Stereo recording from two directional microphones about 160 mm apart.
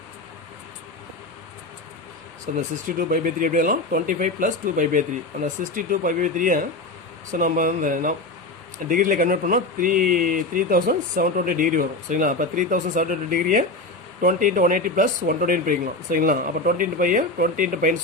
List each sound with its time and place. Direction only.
2.5 s speech: 60° right (ahead or behind)